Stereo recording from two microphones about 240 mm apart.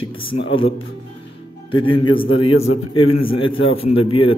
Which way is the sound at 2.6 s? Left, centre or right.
Left.